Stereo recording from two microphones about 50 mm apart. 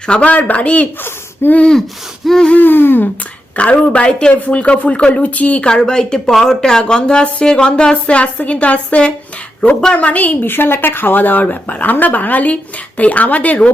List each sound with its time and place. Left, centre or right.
0.1 s speech: left
1.0 s a sound: left
2.2 s a sound: centre
2.6 s speech: left
3.5 s speech: left
5.6 s a woman's voice: centre; by 10.3 s left
10.4 s speech: left